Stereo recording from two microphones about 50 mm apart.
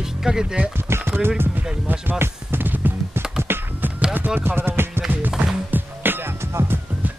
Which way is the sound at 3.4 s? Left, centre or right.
Right.